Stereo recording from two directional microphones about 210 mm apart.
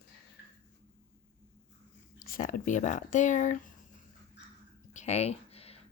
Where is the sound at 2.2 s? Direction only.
40° left (ahead or behind).